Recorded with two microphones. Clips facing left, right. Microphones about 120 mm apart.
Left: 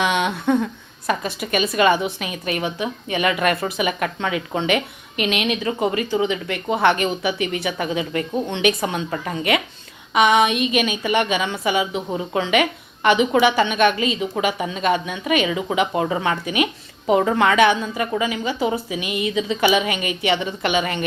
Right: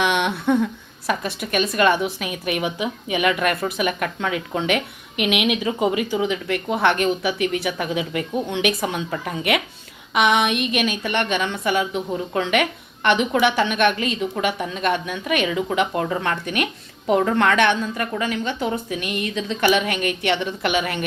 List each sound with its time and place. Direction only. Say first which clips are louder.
0.0 s a woman's voice: even; centre (ahead or behind)